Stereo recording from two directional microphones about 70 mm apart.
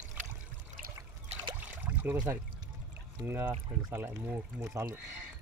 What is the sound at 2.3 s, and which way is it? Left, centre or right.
Speech, right.